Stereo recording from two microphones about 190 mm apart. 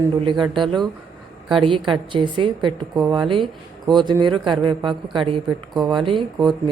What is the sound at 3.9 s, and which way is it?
Speech, 25° right (ahead or behind).